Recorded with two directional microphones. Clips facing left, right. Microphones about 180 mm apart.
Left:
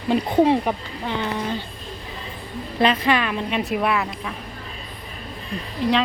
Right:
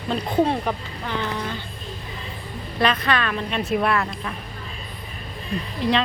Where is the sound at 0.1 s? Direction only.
15° left (ahead or behind).